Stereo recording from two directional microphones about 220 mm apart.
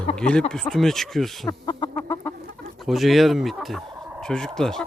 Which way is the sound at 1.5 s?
20° left (ahead or behind).